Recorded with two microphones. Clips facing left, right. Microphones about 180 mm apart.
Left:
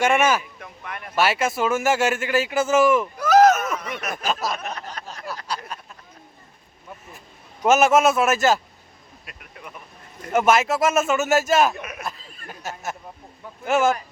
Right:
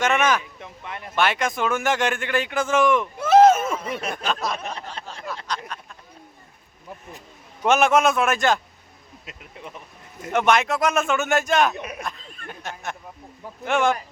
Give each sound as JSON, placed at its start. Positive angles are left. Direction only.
{"t": 0.0, "sound": "a man's voice", "side_deg": 10}
{"t": 0.6, "sound": "a sound", "side_deg": -20}
{"t": 1.1, "sound": "a man's voice", "side_deg": 5}
{"t": 3.2, "sound": "a sound", "side_deg": -25}
{"t": 4.1, "sound": "a man's voice", "side_deg": 5}
{"t": 4.5, "sound": "speech", "side_deg": -30}
{"t": 5.7, "sound": "a sound", "side_deg": 10}
{"t": 7.6, "sound": "a man's voice", "side_deg": 5}
{"t": 9.2, "sound": "speech", "side_deg": -25}
{"t": 10.3, "sound": "a man's voice", "side_deg": 5}
{"t": 11.7, "sound": "speech", "side_deg": -30}
{"t": 12.0, "sound": "a sound", "side_deg": 5}
{"t": 13.7, "sound": "a man's voice", "side_deg": 5}